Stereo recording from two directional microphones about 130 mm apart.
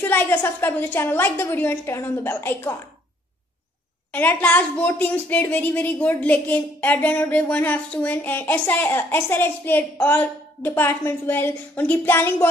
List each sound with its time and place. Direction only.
0.0 s a woman's voice: 15° left (ahead or behind)
4.1 s a woman's voice: 15° left (ahead or behind)